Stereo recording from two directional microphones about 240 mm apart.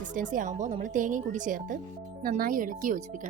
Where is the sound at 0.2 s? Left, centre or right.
Right.